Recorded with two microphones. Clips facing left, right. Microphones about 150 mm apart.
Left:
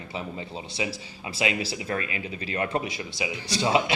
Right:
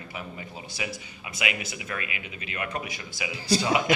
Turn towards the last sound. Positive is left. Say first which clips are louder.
# right 1 dB
turn(degrees=25)  # may be behind; listen again after turning